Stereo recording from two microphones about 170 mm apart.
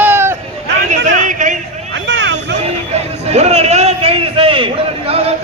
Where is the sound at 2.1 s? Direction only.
90° right.